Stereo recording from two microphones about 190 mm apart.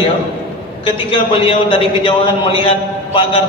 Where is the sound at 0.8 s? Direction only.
30° left (ahead or behind).